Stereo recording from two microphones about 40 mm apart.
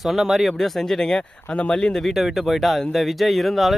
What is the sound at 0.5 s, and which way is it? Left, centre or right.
Speech, centre.